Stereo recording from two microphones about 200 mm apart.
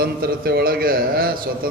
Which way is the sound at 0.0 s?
50° right (ahead or behind).